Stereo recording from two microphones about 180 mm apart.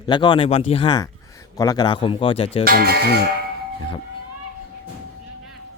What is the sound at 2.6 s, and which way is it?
Speech, 60° right (ahead or behind).